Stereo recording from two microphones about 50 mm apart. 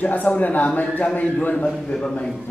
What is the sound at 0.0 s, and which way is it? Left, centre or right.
Speech, left.